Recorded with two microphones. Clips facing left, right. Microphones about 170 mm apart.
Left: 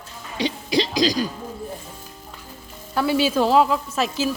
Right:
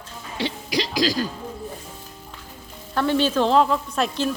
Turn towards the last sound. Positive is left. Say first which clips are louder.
# even
turn(degrees=5)  # may be behind; listen again after turning